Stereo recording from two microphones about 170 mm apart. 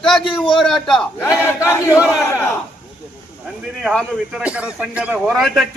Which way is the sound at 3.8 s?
5° left (ahead or behind).